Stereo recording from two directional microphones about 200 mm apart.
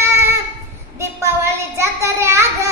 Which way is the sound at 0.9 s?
15° right (ahead or behind).